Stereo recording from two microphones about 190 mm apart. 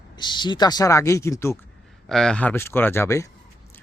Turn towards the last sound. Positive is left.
turn(degrees=15)  # may be behind; listen again after turning